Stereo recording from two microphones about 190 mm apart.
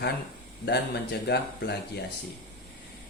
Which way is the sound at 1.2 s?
60° left (ahead or behind).